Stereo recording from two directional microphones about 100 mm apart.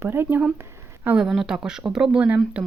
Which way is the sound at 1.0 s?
5° right (ahead or behind).